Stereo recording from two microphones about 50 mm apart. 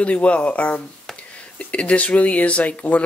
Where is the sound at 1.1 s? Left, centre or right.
Centre.